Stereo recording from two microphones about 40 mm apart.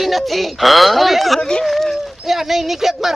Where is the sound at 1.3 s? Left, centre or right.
Left.